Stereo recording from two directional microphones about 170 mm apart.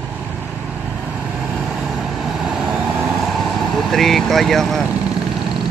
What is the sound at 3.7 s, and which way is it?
Speech, centre (ahead or behind).